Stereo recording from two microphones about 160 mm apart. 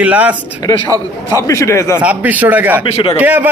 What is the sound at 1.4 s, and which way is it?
Speech, 20° left (ahead or behind).